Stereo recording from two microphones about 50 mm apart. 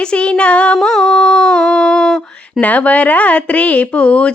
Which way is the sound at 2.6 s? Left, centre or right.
Left.